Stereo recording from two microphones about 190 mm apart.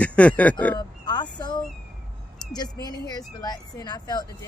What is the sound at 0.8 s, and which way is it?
Speech, 20° left (ahead or behind).